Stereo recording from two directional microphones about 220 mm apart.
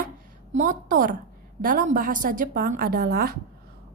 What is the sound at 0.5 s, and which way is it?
A woman's voice, 35° right (ahead or behind).